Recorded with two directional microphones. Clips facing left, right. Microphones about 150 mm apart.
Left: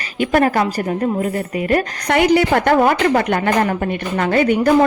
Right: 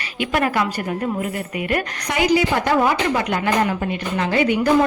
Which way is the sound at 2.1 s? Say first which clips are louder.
Left 4 dB; 60° left (ahead or behind).